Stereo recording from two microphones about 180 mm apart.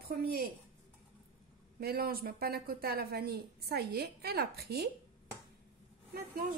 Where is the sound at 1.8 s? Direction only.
55° right (ahead or behind).